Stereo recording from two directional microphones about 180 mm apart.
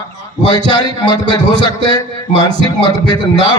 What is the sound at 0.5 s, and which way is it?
A man's voice, 25° left (ahead or behind).